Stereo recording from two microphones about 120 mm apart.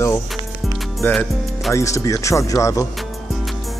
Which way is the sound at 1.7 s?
25° left (ahead or behind).